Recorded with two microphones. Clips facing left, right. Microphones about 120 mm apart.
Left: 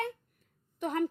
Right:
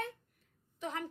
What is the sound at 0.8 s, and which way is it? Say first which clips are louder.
Speech: left 9 dB; 50° left (ahead or behind).